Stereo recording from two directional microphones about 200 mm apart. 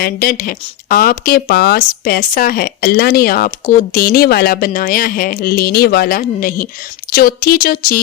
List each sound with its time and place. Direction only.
0.0 s speech: 45° left (ahead or behind)